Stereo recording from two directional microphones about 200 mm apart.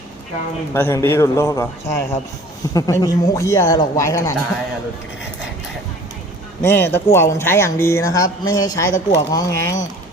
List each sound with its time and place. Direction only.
0.7 s speech: 10° left (ahead or behind)
6.6 s speech: 10° left (ahead or behind)